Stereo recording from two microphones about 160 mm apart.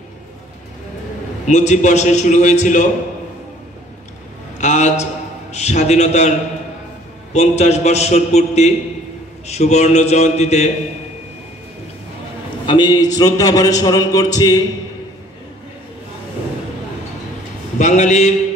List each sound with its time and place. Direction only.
1.4 s a man's voice: 45° left (ahead or behind)
4.6 s a sound: 45° left (ahead or behind)
5.5 s a man's voice: 45° left (ahead or behind)
7.3 s a man's voice: 45° left (ahead or behind)
12.6 s a man's voice: 30° left (ahead or behind)
17.7 s a man's voice: 50° left (ahead or behind)